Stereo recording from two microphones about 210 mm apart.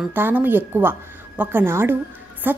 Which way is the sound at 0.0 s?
10° right (ahead or behind).